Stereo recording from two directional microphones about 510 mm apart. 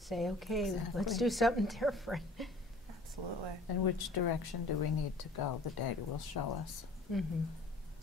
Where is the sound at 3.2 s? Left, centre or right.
Right.